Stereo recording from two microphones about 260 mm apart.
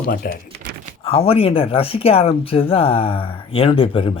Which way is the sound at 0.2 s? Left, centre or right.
Left.